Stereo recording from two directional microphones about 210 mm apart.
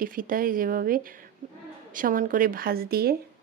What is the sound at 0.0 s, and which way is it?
A woman's voice, 40° right (ahead or behind).